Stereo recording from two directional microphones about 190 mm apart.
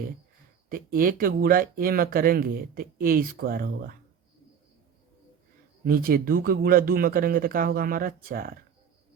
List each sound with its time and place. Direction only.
0.7 s speech: 50° right (ahead or behind)
5.8 s speech: 50° right (ahead or behind)